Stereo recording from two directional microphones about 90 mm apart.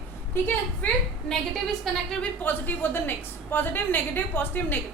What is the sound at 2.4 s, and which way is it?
A woman's voice, 20° left (ahead or behind).